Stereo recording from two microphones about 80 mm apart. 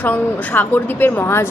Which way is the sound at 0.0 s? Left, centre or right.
Left.